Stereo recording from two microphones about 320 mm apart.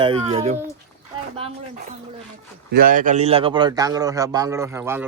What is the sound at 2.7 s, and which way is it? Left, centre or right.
Speech, right.